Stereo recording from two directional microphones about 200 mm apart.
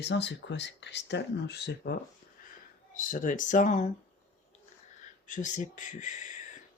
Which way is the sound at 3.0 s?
40° left (ahead or behind).